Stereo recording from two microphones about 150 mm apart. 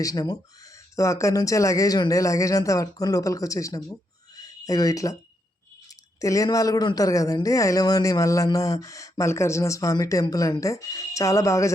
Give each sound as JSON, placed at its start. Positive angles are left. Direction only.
{"t": 0.0, "sound": "speech", "side_deg": 25}
{"t": 4.4, "sound": "a sound", "side_deg": 25}
{"t": 6.1, "sound": "speech", "side_deg": 20}